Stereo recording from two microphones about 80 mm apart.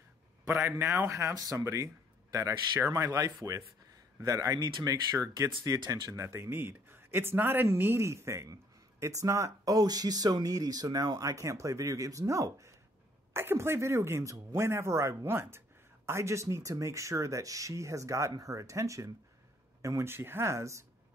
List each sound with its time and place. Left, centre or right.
0.5 s speech: right
1.0 s speech: right
2.9 s speech: right
6.1 s speech: right